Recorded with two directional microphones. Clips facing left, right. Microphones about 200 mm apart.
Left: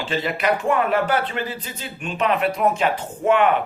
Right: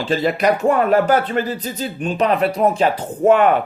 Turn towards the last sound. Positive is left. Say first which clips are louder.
# right 5 dB
turn(degrees=-40)  # may be behind; listen again after turning